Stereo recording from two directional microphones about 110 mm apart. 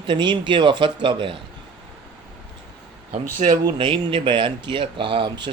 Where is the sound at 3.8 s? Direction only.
50° right (ahead or behind).